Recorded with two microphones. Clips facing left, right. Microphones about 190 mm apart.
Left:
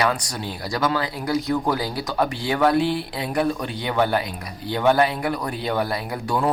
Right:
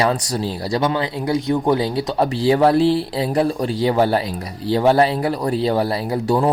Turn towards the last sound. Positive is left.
turn(degrees=-30)  # may be behind; listen again after turning